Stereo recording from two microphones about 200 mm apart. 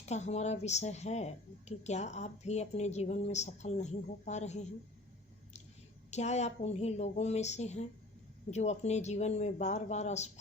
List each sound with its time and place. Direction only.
0.0 s speech: 35° left (ahead or behind)
6.1 s speech: 35° left (ahead or behind)